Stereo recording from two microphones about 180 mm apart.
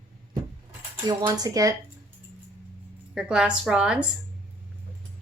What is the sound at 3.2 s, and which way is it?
Speech, 5° right (ahead or behind).